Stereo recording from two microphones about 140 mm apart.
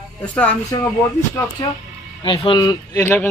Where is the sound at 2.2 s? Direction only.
35° left (ahead or behind); by 3.3 s 20° left (ahead or behind).